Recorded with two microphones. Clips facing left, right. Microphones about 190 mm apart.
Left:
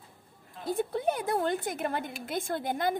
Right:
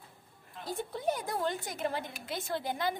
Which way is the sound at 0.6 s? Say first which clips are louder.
Left 5 dB; 55° left (ahead or behind).